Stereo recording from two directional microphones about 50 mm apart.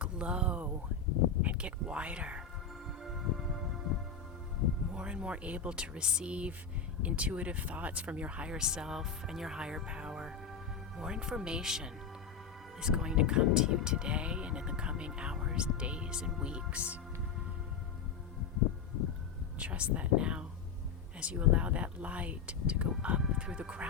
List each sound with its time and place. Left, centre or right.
0.0 s a sound: right
1.4 s speech: right
3.0 s music: centre
4.9 s speech: right
19.5 s speech: right